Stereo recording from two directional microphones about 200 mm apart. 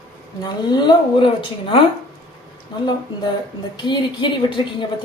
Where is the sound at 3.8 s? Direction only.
25° left (ahead or behind).